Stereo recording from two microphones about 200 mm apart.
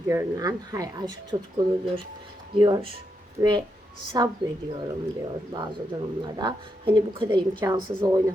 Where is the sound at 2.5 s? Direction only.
20° right (ahead or behind).